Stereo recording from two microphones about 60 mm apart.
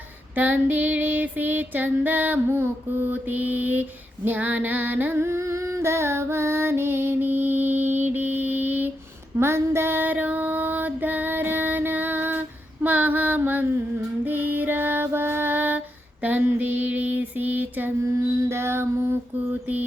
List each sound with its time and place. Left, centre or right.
0.3 s female singing: right
5.2 s music: right
9.4 s female singing: right
18.3 s music: right